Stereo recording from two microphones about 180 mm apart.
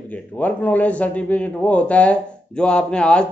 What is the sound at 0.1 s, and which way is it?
A man's voice, 10° left (ahead or behind).